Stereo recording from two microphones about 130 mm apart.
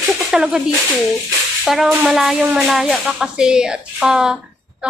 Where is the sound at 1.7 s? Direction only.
5° right (ahead or behind).